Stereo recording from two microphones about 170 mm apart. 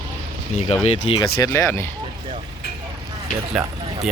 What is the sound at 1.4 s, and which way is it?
Speech, 20° left (ahead or behind).